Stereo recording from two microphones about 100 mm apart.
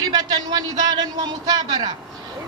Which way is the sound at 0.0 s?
40° right (ahead or behind).